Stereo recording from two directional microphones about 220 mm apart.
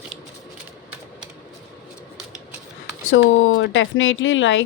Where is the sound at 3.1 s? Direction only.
60° left (ahead or behind).